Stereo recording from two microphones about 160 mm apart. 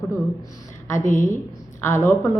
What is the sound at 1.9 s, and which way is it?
Speech, 15° left (ahead or behind).